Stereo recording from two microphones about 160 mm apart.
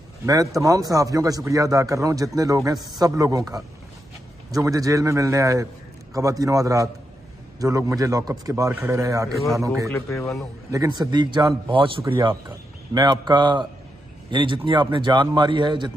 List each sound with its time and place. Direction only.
0.3 s a man's voice: 20° right (ahead or behind)
4.5 s a man's voice: 20° right (ahead or behind)
9.8 s speech: 15° left (ahead or behind)
10.7 s a man's voice: 25° right (ahead or behind)